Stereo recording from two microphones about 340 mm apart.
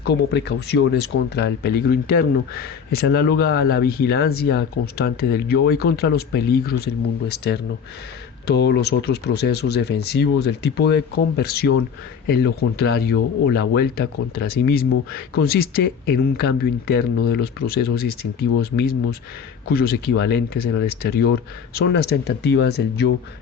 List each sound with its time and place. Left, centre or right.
0.0 s speech: left